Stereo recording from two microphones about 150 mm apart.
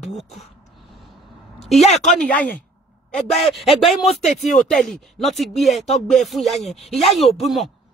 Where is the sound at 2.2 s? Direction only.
10° left (ahead or behind).